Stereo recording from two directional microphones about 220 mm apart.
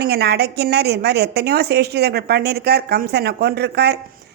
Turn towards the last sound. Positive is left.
turn(degrees=-50)  # may be behind; listen again after turning